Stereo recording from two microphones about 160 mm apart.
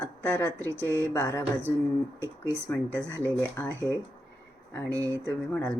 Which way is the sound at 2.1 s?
15° right (ahead or behind).